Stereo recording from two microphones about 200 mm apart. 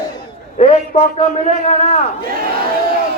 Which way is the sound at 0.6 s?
35° left (ahead or behind).